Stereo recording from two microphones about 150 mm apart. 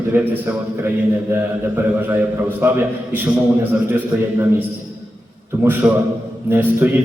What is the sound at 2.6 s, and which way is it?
Speech, 15° right (ahead or behind).